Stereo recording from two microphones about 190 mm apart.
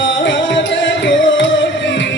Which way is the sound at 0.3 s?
75° left (ahead or behind).